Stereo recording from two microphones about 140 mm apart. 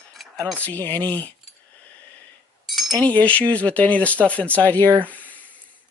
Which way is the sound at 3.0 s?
10° left (ahead or behind).